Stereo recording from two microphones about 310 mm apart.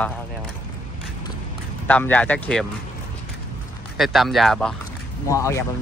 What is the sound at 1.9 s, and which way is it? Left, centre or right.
Speech, centre.